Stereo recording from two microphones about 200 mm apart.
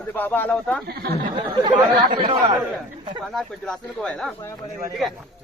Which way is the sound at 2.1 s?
20° right (ahead or behind).